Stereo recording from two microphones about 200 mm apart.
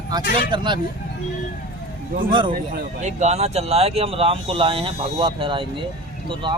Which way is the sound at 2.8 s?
35° right (ahead or behind).